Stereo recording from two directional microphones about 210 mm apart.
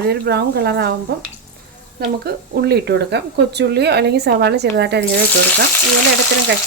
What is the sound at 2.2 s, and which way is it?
Speech, 50° right (ahead or behind).